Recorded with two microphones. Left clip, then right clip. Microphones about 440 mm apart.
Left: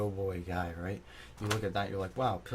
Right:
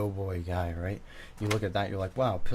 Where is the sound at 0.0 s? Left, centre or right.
Right.